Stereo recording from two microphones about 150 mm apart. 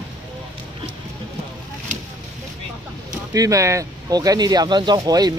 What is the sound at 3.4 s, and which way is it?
Speech, 20° right (ahead or behind).